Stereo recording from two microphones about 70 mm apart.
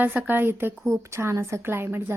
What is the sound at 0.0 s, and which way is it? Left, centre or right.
Speech, right.